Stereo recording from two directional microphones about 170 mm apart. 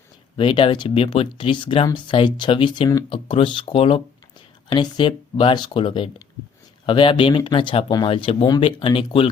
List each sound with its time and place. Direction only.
0.3 s speech: 30° left (ahead or behind)